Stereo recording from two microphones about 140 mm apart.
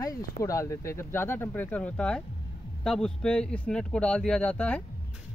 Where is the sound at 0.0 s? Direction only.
25° left (ahead or behind).